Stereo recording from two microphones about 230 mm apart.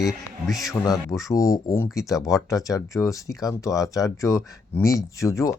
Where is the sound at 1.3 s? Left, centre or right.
Centre.